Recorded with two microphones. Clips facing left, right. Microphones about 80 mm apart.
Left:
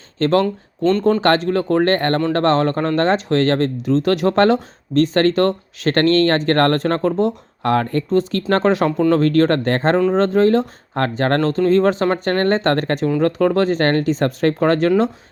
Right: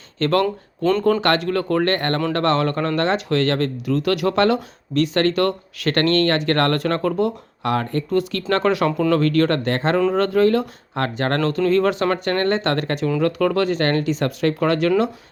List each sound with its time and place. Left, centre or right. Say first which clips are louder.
0.2 s speech: left 2 dB; left
7.6 s speech: left 4 dB; left
8.1 s speech: left 3 dB; left
10.1 s speech: left 1 dB; left